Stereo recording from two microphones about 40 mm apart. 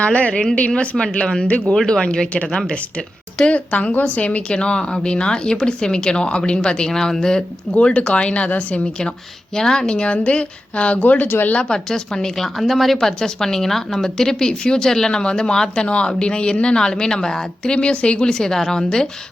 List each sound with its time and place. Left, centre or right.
0.0 s a woman's voice: left
1.5 s speech: left
1.9 s a woman's voice: left
3.7 s a woman's voice: left; by 7.8 s centre
7.8 s a woman's voice: left
9.6 s a woman's voice: centre
9.9 s speech: left
11.3 s speech: left
11.7 s a woman's voice: centre
12.5 s a woman's voice: centre
17.7 s a woman's voice: left
18.3 s a woman's voice: centre